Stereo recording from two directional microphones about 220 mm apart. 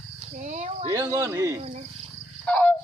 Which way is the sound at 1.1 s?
15° right (ahead or behind).